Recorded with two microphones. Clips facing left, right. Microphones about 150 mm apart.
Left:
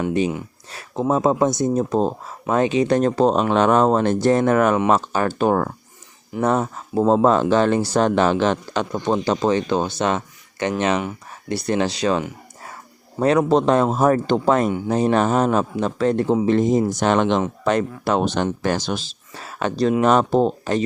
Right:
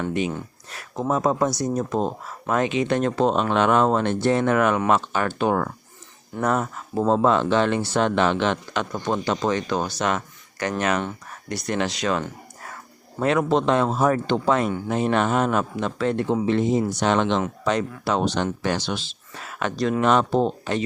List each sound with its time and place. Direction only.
0.7 s speech: 30° left (ahead or behind)